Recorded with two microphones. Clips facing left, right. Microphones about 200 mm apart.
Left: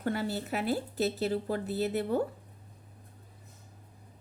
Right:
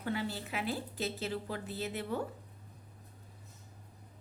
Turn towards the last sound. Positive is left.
turn(degrees=40)  # may be behind; listen again after turning